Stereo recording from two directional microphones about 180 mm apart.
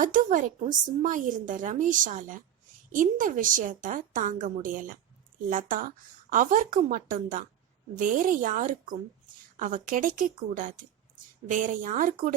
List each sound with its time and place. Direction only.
0.0 s a woman's voice: 45° right (ahead or behind)